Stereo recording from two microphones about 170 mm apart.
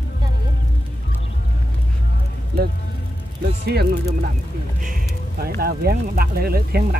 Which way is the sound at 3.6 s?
70° right (ahead or behind).